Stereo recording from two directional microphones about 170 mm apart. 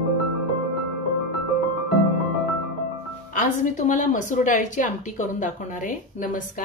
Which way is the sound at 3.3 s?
45° left (ahead or behind).